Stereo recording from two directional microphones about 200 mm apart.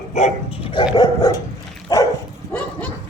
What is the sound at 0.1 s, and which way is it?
Speech, 35° left (ahead or behind).